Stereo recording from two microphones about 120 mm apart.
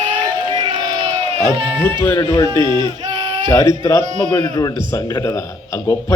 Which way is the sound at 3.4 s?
25° left (ahead or behind).